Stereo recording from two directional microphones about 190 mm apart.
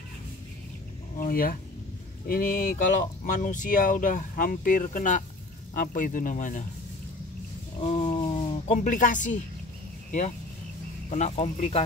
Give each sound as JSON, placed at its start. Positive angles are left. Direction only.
{"t": 1.2, "sound": "speech", "side_deg": 50}
{"t": 7.8, "sound": "speech", "side_deg": 40}
{"t": 11.1, "sound": "speech", "side_deg": 35}